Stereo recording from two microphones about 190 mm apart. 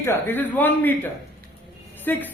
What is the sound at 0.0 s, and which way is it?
Speech, 10° left (ahead or behind).